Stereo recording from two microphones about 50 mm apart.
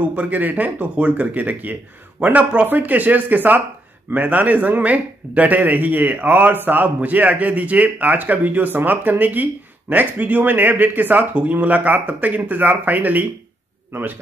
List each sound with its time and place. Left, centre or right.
0.0 s a man's voice: right